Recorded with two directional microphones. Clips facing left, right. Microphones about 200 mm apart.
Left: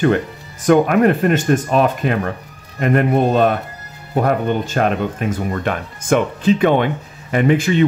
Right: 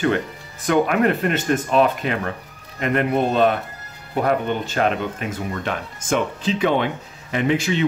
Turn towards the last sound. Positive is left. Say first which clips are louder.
# left 6 dB
turn(degrees=50)  # may be behind; listen again after turning